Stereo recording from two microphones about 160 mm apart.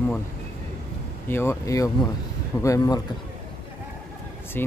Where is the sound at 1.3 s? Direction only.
15° left (ahead or behind).